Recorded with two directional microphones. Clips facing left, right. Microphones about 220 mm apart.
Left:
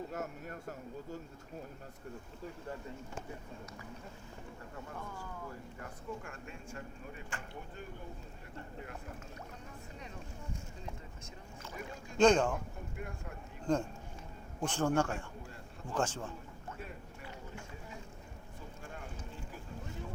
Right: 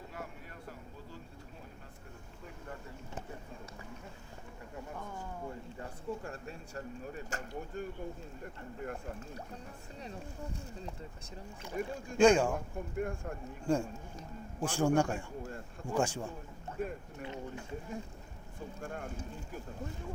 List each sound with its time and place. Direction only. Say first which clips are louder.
0.1 s a sound: left 5 dB; 45° left (ahead or behind)
5.1 s speech: right 3 dB; 25° right (ahead or behind)
10.0 s speech: right 8 dB; 35° right (ahead or behind)
11.8 s speech: right 9 dB; 50° right (ahead or behind)
12.1 s a man's voice: right 2 dB; 10° right (ahead or behind)
13.0 s speech: right 10 dB; 50° right (ahead or behind)
13.7 s a man's voice: right 1 dB; 10° right (ahead or behind)
16.8 s speech: right 12 dB; 50° right (ahead or behind)
18.8 s speech: right 7 dB; 50° right (ahead or behind)